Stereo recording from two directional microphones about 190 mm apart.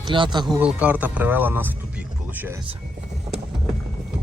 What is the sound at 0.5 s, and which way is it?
Speech, 5° right (ahead or behind).